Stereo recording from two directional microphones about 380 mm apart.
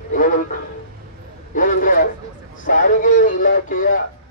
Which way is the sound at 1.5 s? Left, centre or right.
Left.